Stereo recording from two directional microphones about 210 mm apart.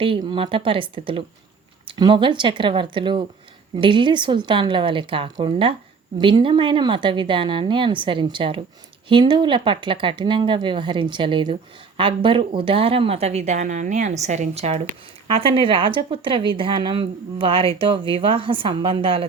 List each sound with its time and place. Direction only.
0.0 s a woman's voice: 25° right (ahead or behind)